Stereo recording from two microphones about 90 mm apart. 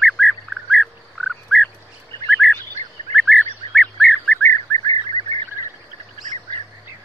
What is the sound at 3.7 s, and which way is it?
Bird, 15° left (ahead or behind).